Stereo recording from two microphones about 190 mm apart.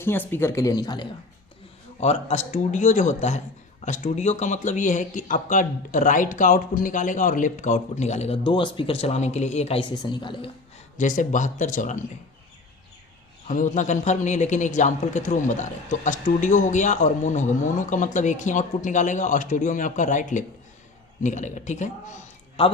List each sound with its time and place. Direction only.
0.0 s speech: 10° left (ahead or behind)
2.0 s a man's voice: 35° left (ahead or behind)
10.0 s a woman's voice: 25° left (ahead or behind)
10.9 s a man's voice: 45° left (ahead or behind)
13.5 s a man's voice: 40° left (ahead or behind)